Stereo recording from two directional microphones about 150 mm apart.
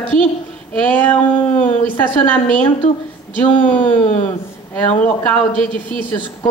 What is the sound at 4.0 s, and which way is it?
Speech, 50° left (ahead or behind).